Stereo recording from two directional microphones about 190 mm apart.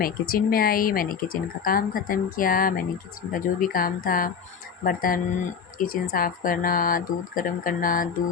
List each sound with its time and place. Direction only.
0.0 s speech: 50° left (ahead or behind)